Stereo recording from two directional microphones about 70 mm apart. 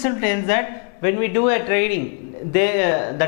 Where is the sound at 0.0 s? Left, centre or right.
Centre.